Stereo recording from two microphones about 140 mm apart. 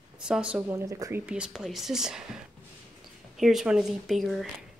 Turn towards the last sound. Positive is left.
turn(degrees=0)  # may be behind; listen again after turning